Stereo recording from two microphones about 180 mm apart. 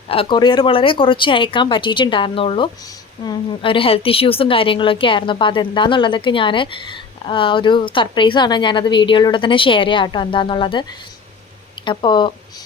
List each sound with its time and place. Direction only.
0.1 s speech: 30° left (ahead or behind)
11.9 s speech: 25° left (ahead or behind)